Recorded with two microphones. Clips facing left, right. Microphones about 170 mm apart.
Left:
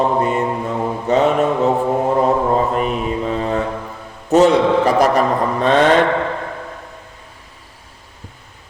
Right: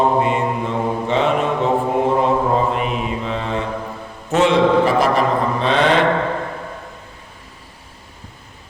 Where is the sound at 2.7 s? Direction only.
40° left (ahead or behind).